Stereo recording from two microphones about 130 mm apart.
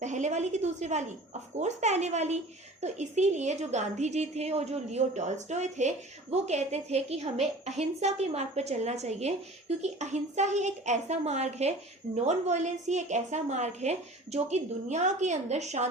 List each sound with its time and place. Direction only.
0.0 s a woman's voice: 65° right (ahead or behind)